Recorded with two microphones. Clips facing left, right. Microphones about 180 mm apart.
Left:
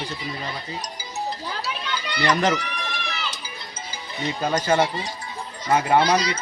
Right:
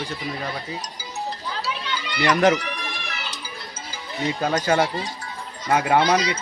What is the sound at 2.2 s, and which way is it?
Speech, 15° right (ahead or behind).